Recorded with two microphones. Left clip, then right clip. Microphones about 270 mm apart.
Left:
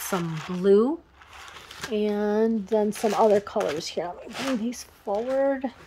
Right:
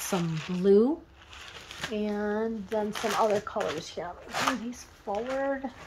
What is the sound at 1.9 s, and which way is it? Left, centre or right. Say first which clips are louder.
Speech: left 6 dB; left.